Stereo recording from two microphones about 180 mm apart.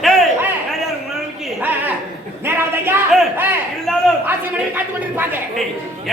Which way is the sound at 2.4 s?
15° right (ahead or behind).